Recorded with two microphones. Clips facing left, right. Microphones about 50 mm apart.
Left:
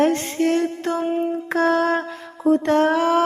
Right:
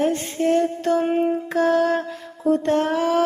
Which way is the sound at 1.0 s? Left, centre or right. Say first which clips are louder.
Right 2 dB; right.